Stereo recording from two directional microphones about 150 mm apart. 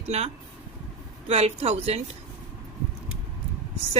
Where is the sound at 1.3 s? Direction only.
40° right (ahead or behind).